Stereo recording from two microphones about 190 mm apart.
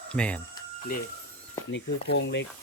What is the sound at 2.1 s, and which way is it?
Speech, 65° left (ahead or behind).